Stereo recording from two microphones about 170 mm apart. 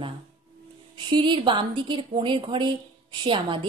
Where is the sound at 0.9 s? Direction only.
30° right (ahead or behind).